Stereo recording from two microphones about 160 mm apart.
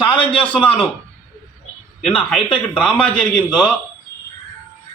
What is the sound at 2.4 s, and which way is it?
Speech, 30° left (ahead or behind).